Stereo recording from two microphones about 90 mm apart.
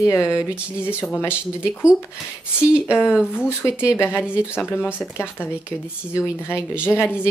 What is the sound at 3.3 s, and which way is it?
Speech, 30° left (ahead or behind).